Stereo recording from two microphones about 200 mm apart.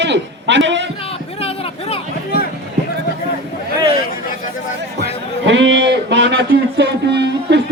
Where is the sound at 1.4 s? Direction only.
30° left (ahead or behind).